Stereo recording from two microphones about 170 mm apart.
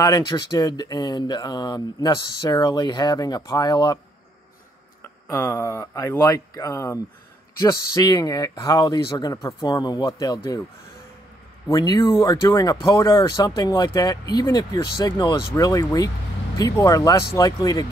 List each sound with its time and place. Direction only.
0.0 s speech: 20° left (ahead or behind)
5.3 s speech: 15° left (ahead or behind)
11.7 s speech: 25° left (ahead or behind)